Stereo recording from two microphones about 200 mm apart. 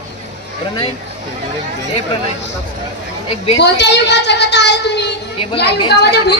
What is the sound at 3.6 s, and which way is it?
A woman's voice, 60° left (ahead or behind).